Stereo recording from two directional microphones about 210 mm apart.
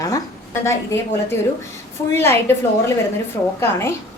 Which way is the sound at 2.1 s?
10° left (ahead or behind).